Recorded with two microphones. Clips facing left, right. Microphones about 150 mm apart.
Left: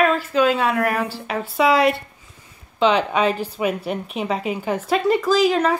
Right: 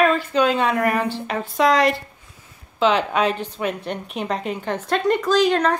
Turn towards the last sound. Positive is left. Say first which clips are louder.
# even
turn(degrees=5)  # may be behind; listen again after turning